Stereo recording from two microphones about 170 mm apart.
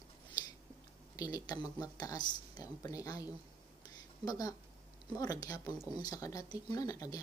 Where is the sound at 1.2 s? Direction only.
25° left (ahead or behind).